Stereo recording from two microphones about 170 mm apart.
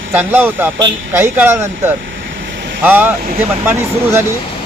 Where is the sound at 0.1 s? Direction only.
10° right (ahead or behind).